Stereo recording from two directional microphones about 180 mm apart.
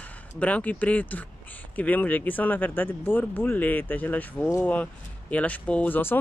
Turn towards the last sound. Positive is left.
turn(degrees=10)  # may be behind; listen again after turning